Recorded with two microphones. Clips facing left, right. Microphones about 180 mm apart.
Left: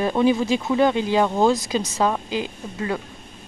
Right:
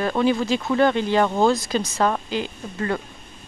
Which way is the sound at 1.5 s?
20° left (ahead or behind).